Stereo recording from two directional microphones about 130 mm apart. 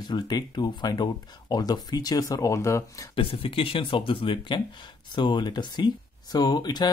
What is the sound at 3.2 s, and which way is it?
Speech, 45° left (ahead or behind).